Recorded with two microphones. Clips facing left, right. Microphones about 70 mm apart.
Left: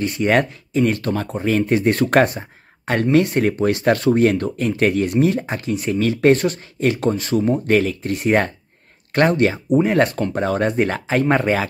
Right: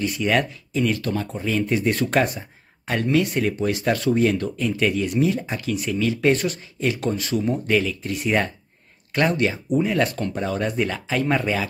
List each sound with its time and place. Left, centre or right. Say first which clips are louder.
0.0 s speech: left 4 dB; left
5.7 s speech: left 3 dB; left